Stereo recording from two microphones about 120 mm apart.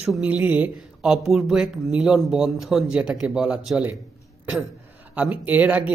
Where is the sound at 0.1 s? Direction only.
10° right (ahead or behind).